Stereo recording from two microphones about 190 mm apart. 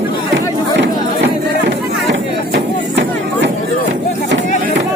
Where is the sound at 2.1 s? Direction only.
65° right (ahead or behind).